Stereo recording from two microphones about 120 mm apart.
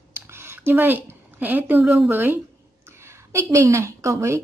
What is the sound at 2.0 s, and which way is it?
A woman's voice, 15° right (ahead or behind).